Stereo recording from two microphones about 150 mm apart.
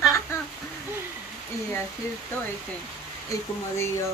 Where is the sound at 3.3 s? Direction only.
20° left (ahead or behind).